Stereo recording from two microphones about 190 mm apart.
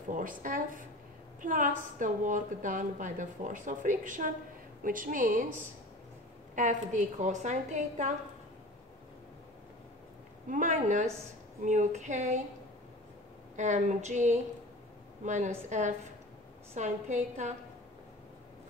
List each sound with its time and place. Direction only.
0.1 s a woman's voice: 45° right (ahead or behind)
10.5 s a woman's voice: 40° right (ahead or behind)
13.6 s a woman's voice: 40° right (ahead or behind)
16.7 s a woman's voice: 40° right (ahead or behind)